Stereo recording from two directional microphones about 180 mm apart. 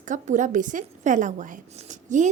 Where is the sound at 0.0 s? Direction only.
45° right (ahead or behind).